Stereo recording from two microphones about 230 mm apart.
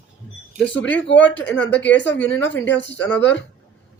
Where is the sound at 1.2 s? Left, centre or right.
Centre.